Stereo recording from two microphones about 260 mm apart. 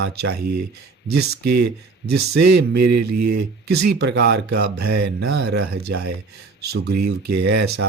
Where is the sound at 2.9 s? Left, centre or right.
Right.